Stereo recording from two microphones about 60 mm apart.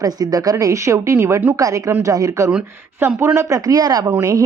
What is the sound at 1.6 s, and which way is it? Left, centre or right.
Speech, right.